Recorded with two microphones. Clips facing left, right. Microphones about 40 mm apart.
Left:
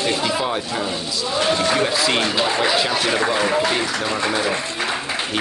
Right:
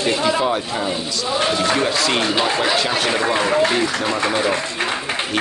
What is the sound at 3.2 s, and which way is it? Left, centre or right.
Speech, right.